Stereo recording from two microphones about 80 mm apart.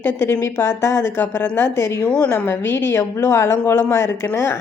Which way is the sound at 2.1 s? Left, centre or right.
Centre.